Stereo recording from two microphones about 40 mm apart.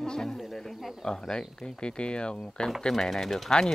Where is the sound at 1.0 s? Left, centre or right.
Centre.